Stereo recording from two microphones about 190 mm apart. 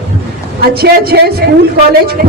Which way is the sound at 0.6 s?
55° right (ahead or behind).